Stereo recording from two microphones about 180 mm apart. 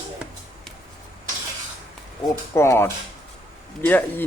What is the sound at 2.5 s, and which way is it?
Speech, 15° left (ahead or behind).